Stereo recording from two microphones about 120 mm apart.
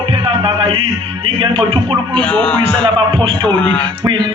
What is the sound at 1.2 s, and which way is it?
Speech, 40° right (ahead or behind).